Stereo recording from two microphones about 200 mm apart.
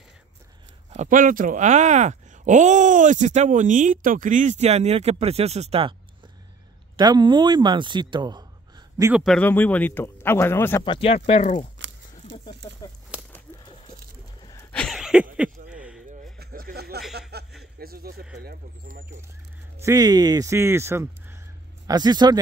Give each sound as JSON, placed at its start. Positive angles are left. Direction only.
{"t": 0.9, "sound": "speech", "side_deg": -40}
{"t": 7.0, "sound": "speech", "side_deg": -20}
{"t": 9.1, "sound": "speech", "side_deg": 0}
{"t": 10.9, "sound": "speech", "side_deg": 30}
{"t": 14.4, "sound": "a sound", "side_deg": 15}
{"t": 16.3, "sound": "a sound", "side_deg": -50}
{"t": 19.8, "sound": "a man's voice", "side_deg": -15}